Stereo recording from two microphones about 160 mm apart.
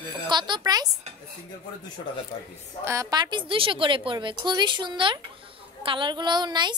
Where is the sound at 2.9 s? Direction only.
20° right (ahead or behind).